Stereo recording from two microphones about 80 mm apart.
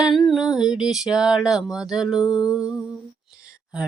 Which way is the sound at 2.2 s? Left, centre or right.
Left.